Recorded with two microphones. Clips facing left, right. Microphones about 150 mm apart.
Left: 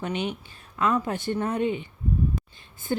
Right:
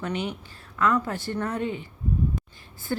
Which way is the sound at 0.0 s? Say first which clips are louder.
Left 1 dB; 20° left (ahead or behind).